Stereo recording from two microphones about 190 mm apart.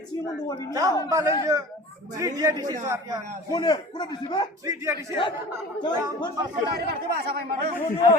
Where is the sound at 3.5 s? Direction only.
25° left (ahead or behind).